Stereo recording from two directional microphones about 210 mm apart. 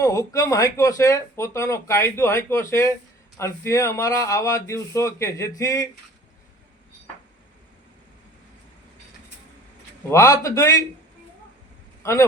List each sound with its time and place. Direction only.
0.0 s speech: 15° left (ahead or behind)
10.1 s speech: 15° left (ahead or behind)
12.0 s speech: 15° left (ahead or behind)